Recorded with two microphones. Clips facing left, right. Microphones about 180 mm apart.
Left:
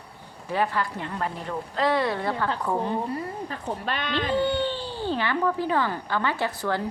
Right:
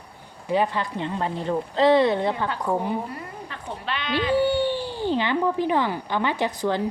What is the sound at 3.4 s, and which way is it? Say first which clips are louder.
Speech: left 2 dB; 40° left (ahead or behind).